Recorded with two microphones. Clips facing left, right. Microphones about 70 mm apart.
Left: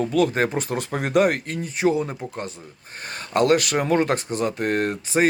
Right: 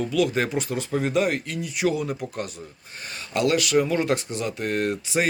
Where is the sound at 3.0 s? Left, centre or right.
Left.